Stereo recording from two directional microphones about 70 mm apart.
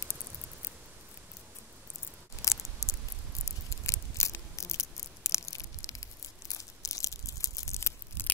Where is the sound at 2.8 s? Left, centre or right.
Left.